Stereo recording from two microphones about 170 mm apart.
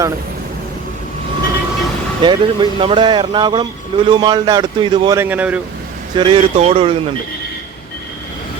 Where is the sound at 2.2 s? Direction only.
30° right (ahead or behind); by 5.5 s 10° right (ahead or behind).